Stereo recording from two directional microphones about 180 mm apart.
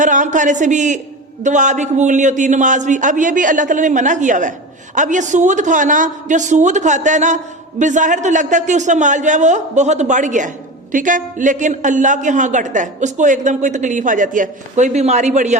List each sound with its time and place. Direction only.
0.0 s a man's voice: 45° right (ahead or behind)